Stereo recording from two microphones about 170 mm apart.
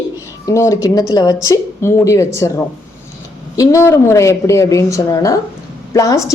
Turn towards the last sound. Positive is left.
turn(degrees=20)  # may be behind; listen again after turning